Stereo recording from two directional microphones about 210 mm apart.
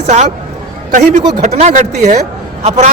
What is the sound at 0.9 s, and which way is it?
Speech, 35° right (ahead or behind).